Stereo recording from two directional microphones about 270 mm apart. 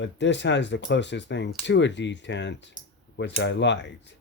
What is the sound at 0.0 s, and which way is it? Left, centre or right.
Speech, left.